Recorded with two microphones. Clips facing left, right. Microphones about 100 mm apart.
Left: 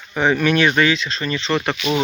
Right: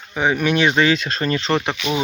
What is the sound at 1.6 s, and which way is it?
Speech, 20° right (ahead or behind).